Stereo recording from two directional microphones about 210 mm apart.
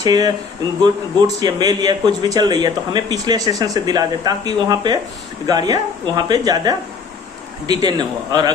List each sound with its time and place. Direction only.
0.0 s a man's voice: 20° right (ahead or behind)
1.4 s a man's voice: 20° right (ahead or behind)